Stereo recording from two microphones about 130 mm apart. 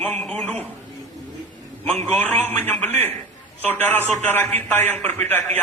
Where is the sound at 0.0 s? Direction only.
10° left (ahead or behind).